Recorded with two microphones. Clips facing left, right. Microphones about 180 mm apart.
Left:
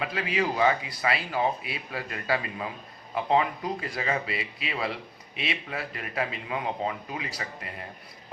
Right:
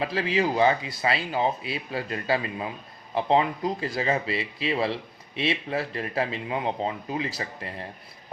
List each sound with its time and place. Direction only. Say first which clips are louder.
0.0 s speech: right 3 dB; 30° right (ahead or behind)